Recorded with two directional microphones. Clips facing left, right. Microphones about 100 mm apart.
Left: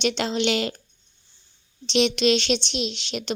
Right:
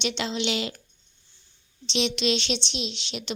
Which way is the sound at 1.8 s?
50° left (ahead or behind).